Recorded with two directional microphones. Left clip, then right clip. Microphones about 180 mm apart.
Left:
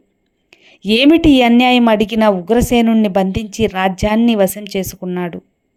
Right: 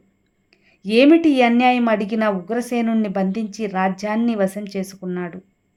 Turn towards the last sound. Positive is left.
turn(degrees=30)  # may be behind; listen again after turning